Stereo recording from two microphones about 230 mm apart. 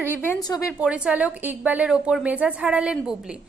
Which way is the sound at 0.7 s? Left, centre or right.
Centre.